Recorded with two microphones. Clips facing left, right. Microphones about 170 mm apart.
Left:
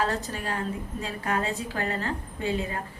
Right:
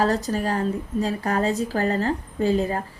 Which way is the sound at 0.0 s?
40° right (ahead or behind).